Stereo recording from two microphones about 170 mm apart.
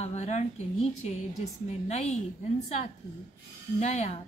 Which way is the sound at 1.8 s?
40° left (ahead or behind).